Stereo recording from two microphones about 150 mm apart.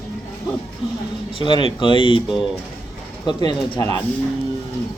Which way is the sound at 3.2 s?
25° left (ahead or behind).